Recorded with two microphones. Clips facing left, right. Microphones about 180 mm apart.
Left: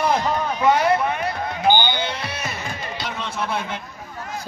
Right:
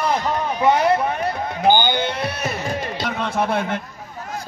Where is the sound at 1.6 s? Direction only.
50° right (ahead or behind).